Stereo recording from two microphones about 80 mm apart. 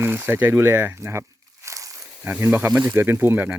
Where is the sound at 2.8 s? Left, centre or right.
Right.